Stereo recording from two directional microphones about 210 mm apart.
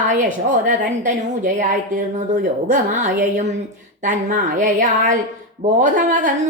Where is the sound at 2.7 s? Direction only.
35° right (ahead or behind).